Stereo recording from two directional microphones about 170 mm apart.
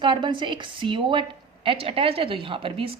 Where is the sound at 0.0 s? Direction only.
30° right (ahead or behind).